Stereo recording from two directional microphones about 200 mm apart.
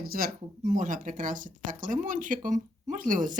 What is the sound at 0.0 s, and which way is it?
Speech, 45° right (ahead or behind).